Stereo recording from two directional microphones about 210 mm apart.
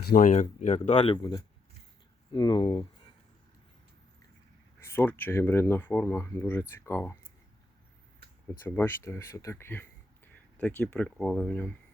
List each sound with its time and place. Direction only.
0.0 s speech: 40° left (ahead or behind); by 2.8 s 20° left (ahead or behind)
4.8 s speech: 10° left (ahead or behind)
8.5 s speech: 10° left (ahead or behind)